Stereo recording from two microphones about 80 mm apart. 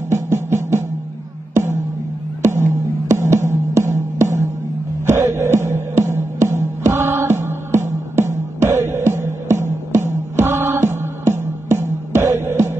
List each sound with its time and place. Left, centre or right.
0.1 s music: right